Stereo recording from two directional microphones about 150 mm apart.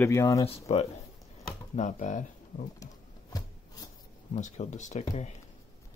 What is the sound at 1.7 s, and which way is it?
Speech, 55° left (ahead or behind).